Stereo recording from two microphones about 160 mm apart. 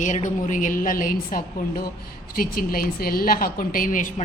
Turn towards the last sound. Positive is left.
turn(degrees=55)  # may be behind; listen again after turning